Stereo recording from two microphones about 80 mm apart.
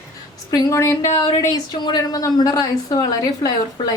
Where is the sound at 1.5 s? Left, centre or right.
Left.